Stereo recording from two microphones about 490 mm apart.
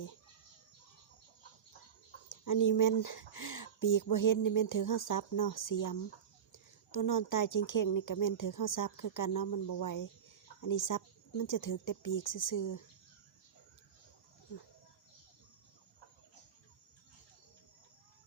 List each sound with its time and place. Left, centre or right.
2.3 s speech: left